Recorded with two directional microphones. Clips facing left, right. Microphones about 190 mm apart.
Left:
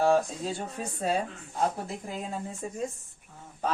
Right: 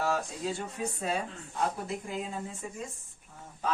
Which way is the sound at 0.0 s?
30° left (ahead or behind).